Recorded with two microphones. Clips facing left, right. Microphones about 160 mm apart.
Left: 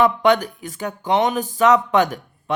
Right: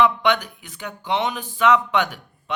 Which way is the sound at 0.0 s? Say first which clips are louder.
Left 3 dB; 45° left (ahead or behind).